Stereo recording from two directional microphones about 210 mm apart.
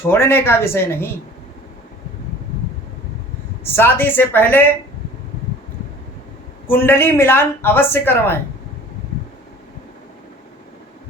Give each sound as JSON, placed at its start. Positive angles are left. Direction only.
{"t": 0.1, "sound": "speech", "side_deg": 10}
{"t": 3.6, "sound": "speech", "side_deg": 10}
{"t": 6.7, "sound": "speech", "side_deg": 10}